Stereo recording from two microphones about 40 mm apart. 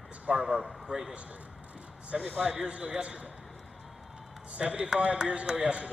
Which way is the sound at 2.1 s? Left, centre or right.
Centre.